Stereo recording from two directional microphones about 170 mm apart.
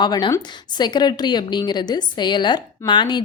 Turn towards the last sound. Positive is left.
turn(degrees=25)  # may be behind; listen again after turning